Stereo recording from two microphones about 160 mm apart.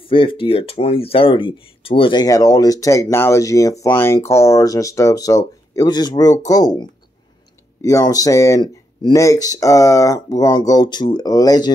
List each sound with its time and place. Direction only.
0.0 s speech: 35° left (ahead or behind)